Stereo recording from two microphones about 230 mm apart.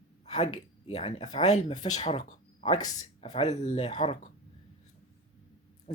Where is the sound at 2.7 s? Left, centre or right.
Centre.